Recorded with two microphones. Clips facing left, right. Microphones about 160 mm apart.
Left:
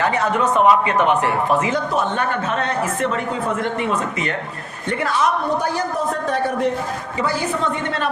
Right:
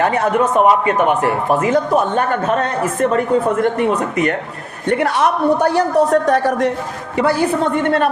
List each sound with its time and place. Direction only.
0.0 s a man's voice: 50° right (ahead or behind); by 6.7 s 85° right
7.2 s a woman's voice: 60° right (ahead or behind)